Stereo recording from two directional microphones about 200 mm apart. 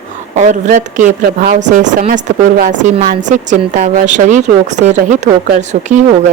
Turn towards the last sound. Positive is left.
turn(degrees=-35)  # may be behind; listen again after turning